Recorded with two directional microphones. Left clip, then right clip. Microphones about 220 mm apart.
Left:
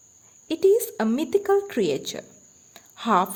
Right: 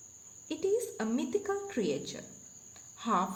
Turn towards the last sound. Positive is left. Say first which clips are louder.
# left 10 dB
turn(degrees=50)  # may be behind; listen again after turning